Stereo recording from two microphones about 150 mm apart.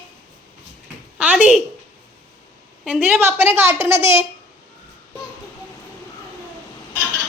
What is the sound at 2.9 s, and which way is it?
A woman's voice, 10° right (ahead or behind).